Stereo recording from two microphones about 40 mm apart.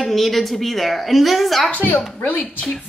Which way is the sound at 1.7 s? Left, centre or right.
Left.